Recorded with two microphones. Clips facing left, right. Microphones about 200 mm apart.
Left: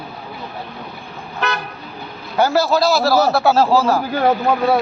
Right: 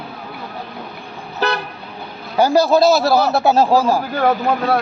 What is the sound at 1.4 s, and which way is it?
Toot, 35° right (ahead or behind).